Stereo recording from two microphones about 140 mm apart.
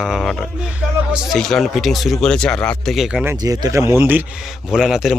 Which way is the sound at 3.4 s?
25° right (ahead or behind).